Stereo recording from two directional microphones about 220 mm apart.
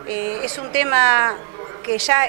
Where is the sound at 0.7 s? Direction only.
20° right (ahead or behind).